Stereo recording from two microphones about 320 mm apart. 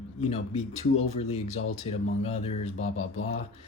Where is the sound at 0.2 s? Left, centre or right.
Centre.